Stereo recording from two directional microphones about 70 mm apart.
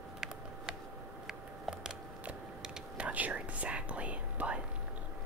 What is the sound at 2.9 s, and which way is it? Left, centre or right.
Whispering, centre.